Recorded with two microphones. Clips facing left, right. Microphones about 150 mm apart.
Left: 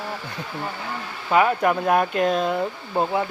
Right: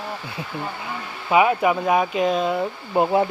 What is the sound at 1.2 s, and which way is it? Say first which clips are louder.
Speech: right 1 dB; 5° right (ahead or behind).